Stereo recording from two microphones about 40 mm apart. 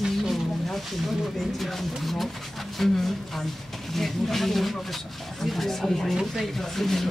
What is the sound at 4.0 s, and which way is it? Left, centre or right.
Speech, centre.